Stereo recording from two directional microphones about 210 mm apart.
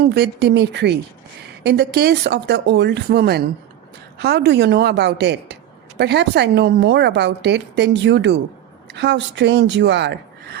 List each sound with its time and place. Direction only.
0.1 s a woman's voice: 50° right (ahead or behind)